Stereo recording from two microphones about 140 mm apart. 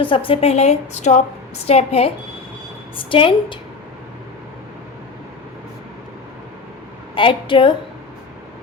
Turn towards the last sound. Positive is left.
turn(degrees=35)  # may be behind; listen again after turning